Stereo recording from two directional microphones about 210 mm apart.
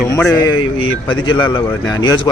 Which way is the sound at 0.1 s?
15° left (ahead or behind).